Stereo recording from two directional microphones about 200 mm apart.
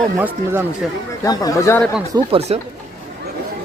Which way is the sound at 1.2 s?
20° left (ahead or behind).